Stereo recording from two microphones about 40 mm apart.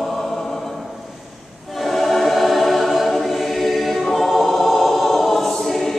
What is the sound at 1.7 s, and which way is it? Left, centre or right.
Choir, centre.